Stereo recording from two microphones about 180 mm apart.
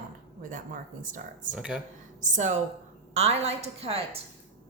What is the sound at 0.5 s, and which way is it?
Speech, 45° right (ahead or behind).